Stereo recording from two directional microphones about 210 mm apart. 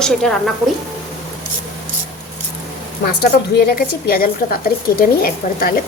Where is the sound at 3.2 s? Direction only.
45° left (ahead or behind).